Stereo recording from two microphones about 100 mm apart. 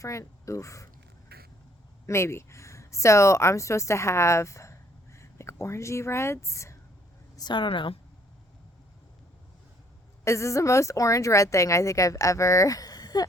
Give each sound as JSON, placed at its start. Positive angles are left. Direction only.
{"t": 0.0, "sound": "speech", "side_deg": 30}
{"t": 2.0, "sound": "speech", "side_deg": 25}
{"t": 7.3, "sound": "a woman's voice", "side_deg": 50}
{"t": 10.2, "sound": "speech", "side_deg": 30}